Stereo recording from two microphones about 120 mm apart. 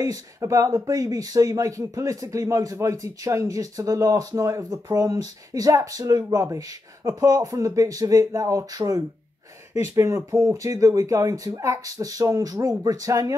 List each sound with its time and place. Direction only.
0.0 s speech: 30° right (ahead or behind)